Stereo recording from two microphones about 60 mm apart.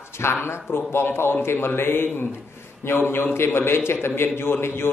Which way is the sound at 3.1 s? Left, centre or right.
Left.